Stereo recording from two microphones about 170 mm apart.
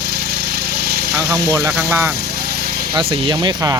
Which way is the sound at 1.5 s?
15° right (ahead or behind).